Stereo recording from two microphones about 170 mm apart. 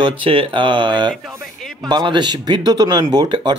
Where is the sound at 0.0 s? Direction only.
30° right (ahead or behind).